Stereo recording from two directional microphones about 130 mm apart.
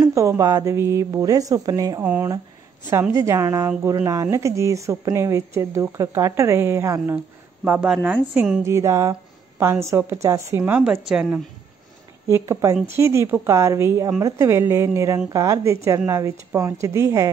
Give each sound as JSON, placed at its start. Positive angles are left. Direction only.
{"t": 0.0, "sound": "a woman's voice", "side_deg": -25}
{"t": 7.6, "sound": "a woman's voice", "side_deg": -10}
{"t": 8.6, "sound": "a woman's voice", "side_deg": -20}
{"t": 10.6, "sound": "a woman's voice", "side_deg": -10}
{"t": 12.3, "sound": "a woman's voice", "side_deg": -20}